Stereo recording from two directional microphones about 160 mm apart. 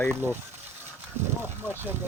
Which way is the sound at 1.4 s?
10° right (ahead or behind).